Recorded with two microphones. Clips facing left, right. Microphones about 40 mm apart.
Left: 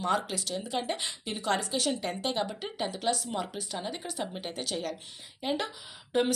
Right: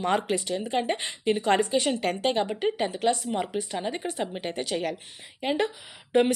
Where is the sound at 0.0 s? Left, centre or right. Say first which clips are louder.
Right 4 dB; right.